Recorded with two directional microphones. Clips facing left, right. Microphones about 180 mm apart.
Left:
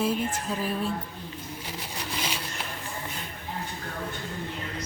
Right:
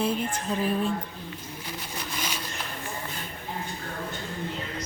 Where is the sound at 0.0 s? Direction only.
Centre (ahead or behind).